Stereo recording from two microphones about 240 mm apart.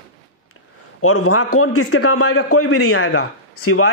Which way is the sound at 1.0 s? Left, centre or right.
Left.